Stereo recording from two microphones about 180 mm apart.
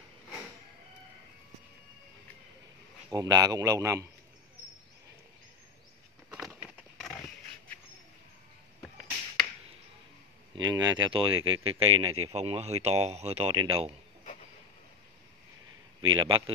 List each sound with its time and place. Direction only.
3.1 s a man's voice: 20° right (ahead or behind)
10.5 s a sound: 25° right (ahead or behind)
11.3 s speech: 90° right
11.8 s speech: 35° right (ahead or behind)
16.2 s a man's voice: 30° right (ahead or behind)